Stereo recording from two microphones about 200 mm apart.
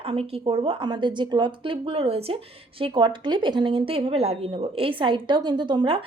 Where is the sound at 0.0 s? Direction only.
30° right (ahead or behind).